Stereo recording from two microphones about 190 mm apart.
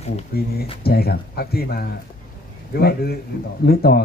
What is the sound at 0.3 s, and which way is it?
Speech, 55° left (ahead or behind).